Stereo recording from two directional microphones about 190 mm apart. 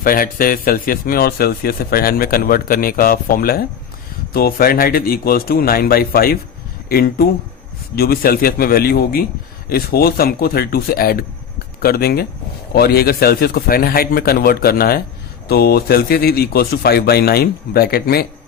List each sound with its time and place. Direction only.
0.0 s speech: 50° left (ahead or behind)